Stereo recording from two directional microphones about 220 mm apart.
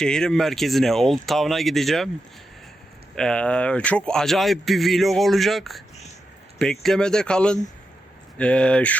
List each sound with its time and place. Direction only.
0.0 s a man's voice: 5° left (ahead or behind)
3.2 s a man's voice: 5° left (ahead or behind)